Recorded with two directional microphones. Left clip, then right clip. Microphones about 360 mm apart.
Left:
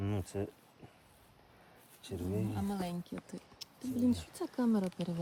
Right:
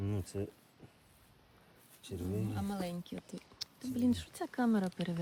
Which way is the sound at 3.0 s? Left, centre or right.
Centre.